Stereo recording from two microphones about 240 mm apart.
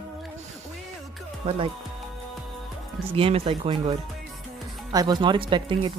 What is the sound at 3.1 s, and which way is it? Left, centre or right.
Speech, right.